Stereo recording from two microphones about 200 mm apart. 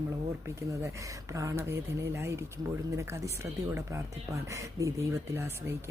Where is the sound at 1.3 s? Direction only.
15° right (ahead or behind).